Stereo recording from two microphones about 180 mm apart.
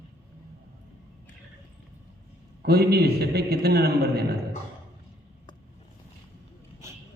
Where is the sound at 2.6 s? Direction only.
60° right (ahead or behind).